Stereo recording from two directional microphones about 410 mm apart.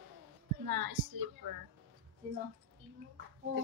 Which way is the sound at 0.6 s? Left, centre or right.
Right.